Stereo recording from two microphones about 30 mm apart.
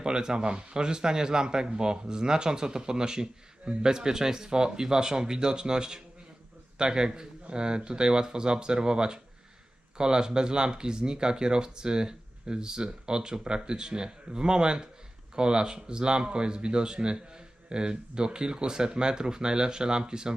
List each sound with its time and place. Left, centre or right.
0.0 s speech: right